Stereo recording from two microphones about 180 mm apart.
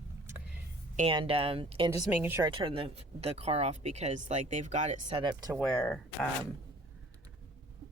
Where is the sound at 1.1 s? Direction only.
30° right (ahead or behind).